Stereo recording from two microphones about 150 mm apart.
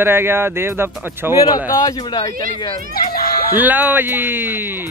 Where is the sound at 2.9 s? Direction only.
80° left.